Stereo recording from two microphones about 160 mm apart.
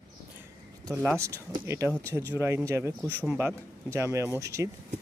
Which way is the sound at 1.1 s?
15° right (ahead or behind).